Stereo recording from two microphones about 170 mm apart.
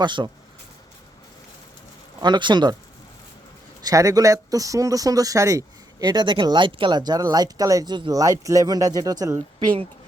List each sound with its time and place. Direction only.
0.0 s speech: 25° right (ahead or behind)
2.2 s speech: 25° right (ahead or behind)
3.8 s speech: 20° right (ahead or behind)